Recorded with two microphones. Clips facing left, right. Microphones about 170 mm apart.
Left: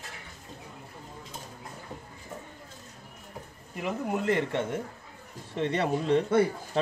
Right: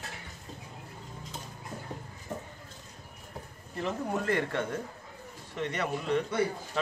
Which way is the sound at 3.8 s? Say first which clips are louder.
Left 2 dB; 15° left (ahead or behind).